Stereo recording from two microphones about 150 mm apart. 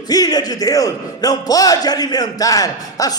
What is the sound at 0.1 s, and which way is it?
A man's voice, 25° left (ahead or behind).